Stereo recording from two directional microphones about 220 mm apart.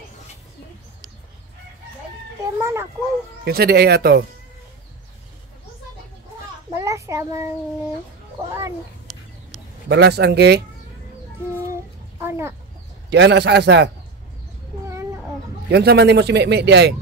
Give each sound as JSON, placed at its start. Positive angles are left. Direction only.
{"t": 2.6, "sound": "a child's voice", "side_deg": -10}
{"t": 3.4, "sound": "speech", "side_deg": -45}
{"t": 6.7, "sound": "a child's voice", "side_deg": -15}
{"t": 9.8, "sound": "speech", "side_deg": -50}
{"t": 11.6, "sound": "a sound", "side_deg": -10}
{"t": 13.1, "sound": "speech", "side_deg": -50}
{"t": 14.9, "sound": "cat", "side_deg": -15}
{"t": 15.7, "sound": "speech", "side_deg": -45}